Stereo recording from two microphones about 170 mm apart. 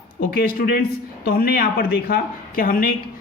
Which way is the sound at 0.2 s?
60° left (ahead or behind).